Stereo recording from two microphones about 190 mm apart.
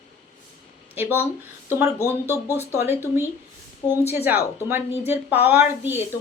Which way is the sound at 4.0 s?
35° left (ahead or behind).